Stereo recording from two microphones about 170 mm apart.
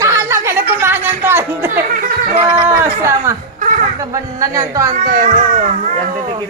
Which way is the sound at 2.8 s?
15° right (ahead or behind).